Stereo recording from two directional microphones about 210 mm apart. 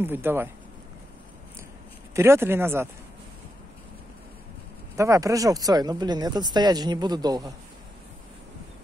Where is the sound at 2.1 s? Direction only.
10° right (ahead or behind).